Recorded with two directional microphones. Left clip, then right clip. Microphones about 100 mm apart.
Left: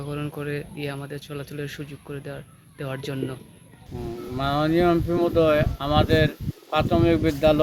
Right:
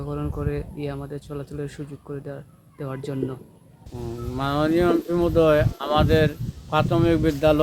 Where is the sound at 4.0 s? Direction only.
40° right (ahead or behind).